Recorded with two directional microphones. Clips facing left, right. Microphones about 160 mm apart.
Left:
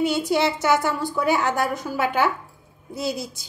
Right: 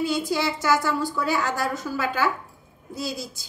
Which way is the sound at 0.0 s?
20° left (ahead or behind).